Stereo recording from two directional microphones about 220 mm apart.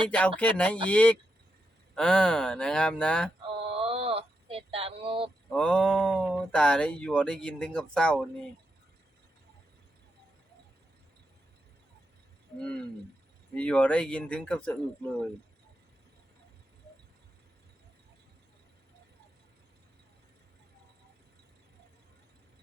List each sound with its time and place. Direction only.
0.1 s speech: 5° left (ahead or behind)
3.5 s a sound: 25° right (ahead or behind)
5.5 s speech: 5° left (ahead or behind)
12.5 s speech: 5° left (ahead or behind)